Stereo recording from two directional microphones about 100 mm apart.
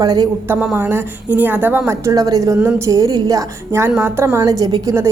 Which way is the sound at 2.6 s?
25° right (ahead or behind).